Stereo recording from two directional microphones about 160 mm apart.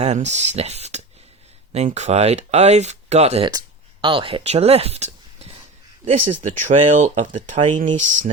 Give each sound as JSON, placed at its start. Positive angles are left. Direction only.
{"t": 0.0, "sound": "speech", "side_deg": -45}